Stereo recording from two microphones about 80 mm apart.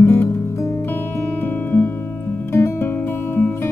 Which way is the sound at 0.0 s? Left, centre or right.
Left.